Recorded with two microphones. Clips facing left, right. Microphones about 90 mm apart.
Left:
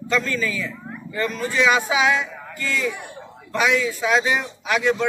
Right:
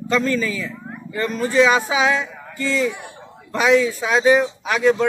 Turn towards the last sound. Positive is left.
turn(degrees=-35)  # may be behind; listen again after turning